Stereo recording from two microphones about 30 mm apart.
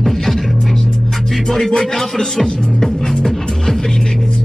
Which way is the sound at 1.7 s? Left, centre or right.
Left.